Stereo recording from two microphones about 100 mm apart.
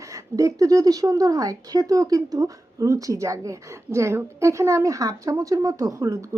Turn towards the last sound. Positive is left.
turn(degrees=-35)  # may be behind; listen again after turning